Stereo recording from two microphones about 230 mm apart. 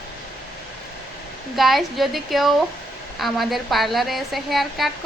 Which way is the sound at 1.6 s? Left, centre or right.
Centre.